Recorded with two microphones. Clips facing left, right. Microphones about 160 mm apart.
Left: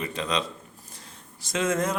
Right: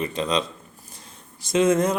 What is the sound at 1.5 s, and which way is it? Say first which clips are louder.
Speech: right 7 dB; 20° right (ahead or behind).